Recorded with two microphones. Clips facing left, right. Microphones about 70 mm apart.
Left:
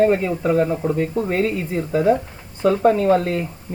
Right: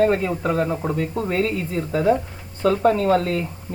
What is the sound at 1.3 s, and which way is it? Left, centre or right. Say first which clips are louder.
Speech: left 2 dB; centre.